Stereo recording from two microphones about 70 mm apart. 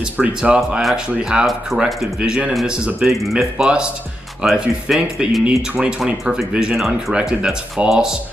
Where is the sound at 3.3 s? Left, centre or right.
Centre.